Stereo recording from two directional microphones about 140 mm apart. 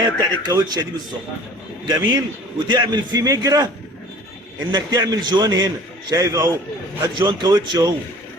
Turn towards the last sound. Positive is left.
turn(degrees=-30)  # may be behind; listen again after turning